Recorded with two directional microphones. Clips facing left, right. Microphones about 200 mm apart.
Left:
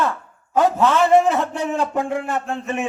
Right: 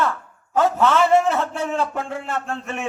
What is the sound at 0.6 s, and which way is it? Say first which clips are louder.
A man's voice: left 1 dB; 15° left (ahead or behind).